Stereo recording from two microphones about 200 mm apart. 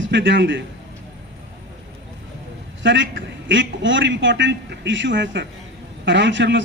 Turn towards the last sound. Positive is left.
turn(degrees=-65)  # may be behind; listen again after turning